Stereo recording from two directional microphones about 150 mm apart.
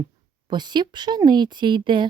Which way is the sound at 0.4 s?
30° right (ahead or behind).